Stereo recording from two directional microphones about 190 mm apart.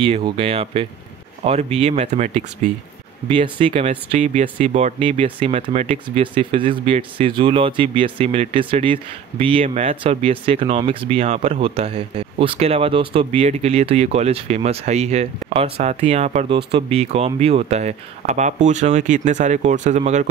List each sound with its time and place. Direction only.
0.0 s speech: 30° right (ahead or behind)
3.3 s speech: 25° right (ahead or behind)
3.8 s speech: 40° right (ahead or behind)